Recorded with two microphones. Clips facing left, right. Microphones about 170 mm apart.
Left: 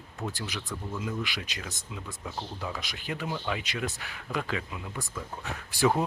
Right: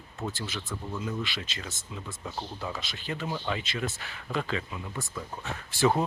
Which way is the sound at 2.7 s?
15° left (ahead or behind).